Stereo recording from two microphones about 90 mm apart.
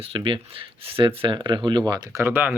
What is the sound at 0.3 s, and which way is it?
Speech, 75° right (ahead or behind).